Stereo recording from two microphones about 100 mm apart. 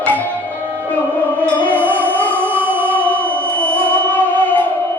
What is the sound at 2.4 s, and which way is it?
Music, 20° right (ahead or behind).